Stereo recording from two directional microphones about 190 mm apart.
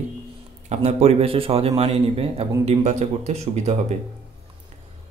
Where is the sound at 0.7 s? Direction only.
35° right (ahead or behind).